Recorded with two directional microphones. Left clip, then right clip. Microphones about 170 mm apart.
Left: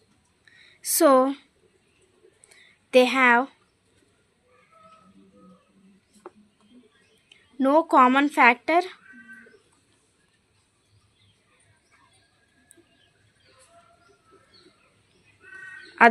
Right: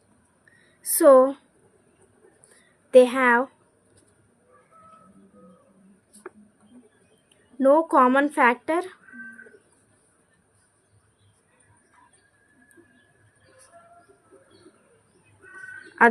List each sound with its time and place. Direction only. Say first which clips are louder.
0.8 s a woman's voice: right 3 dB; 20° left (ahead or behind)
2.9 s a woman's voice: right 1 dB; 15° left (ahead or behind)
7.3 s speech: right 4 dB; 15° left (ahead or behind)